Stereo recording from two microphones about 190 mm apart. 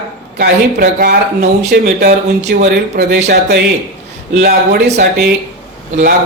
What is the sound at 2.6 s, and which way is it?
Speech, 60° right (ahead or behind).